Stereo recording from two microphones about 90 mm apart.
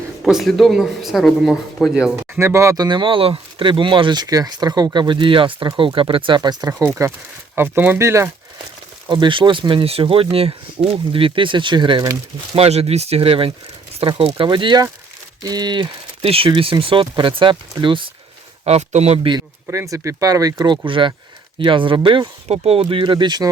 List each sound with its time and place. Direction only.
0.2 s speech: centre (ahead or behind)
2.3 s speech: 30° right (ahead or behind)
2.7 s speech: 55° right (ahead or behind); by 7.1 s 35° right (ahead or behind)
7.5 s speech: 25° right (ahead or behind)
9.0 s speech: 65° right (ahead or behind); by 10.2 s 90° right
10.8 s speech: 80° right; by 12.0 s 55° right (ahead or behind)
12.5 s speech: 90° right
16.8 s speech: 70° right (ahead or behind)
19.3 s speech: 75° right (ahead or behind)
19.7 s speech: 35° right (ahead or behind)
20.8 s speech: 70° right (ahead or behind)